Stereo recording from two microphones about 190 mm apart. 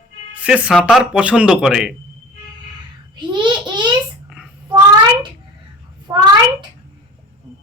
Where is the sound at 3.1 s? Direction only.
25° right (ahead or behind).